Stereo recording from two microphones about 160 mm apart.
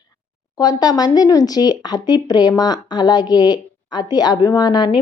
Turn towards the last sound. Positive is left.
turn(degrees=25)  # may be behind; listen again after turning